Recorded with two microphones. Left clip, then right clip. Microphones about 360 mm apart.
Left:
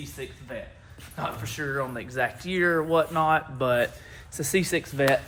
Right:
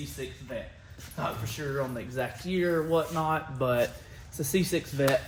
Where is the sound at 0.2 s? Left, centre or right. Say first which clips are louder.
Left 1 dB; centre.